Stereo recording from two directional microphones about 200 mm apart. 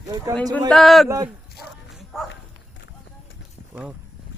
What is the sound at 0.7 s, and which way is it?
Speech, centre (ahead or behind).